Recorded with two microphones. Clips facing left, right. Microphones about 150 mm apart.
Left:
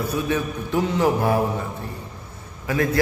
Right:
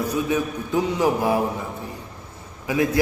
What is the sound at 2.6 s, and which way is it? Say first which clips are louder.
Speech: right 1 dB; 15° right (ahead or behind).